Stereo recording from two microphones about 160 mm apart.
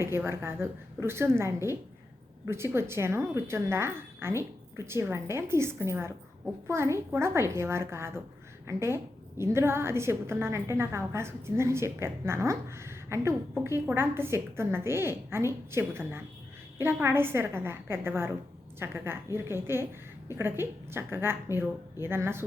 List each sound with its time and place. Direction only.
0.1 s a woman's voice: 15° right (ahead or behind)